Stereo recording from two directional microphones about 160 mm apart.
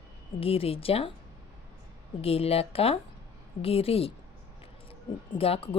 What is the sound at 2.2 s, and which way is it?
Speech, 40° left (ahead or behind).